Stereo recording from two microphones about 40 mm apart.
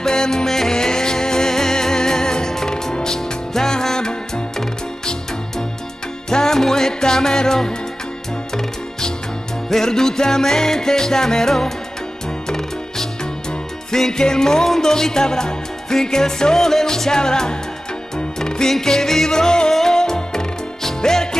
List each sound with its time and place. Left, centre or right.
0.0 s music: centre
6.3 s music: centre
9.7 s music: centre